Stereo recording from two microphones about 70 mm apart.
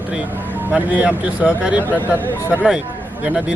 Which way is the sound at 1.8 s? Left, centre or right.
Left.